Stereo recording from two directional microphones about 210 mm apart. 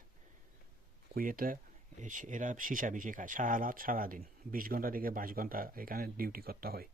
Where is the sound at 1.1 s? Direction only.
40° right (ahead or behind).